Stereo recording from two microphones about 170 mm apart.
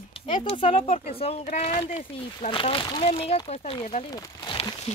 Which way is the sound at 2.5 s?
30° left (ahead or behind).